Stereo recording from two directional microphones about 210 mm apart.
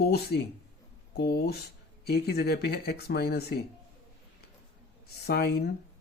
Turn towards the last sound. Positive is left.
turn(degrees=50)  # may be behind; listen again after turning